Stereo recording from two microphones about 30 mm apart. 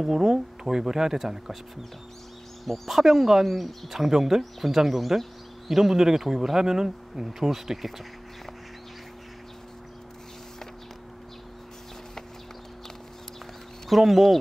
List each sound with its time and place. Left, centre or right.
0.0 s speech: centre
2.6 s speech: centre
7.2 s speech: centre
13.8 s speech: centre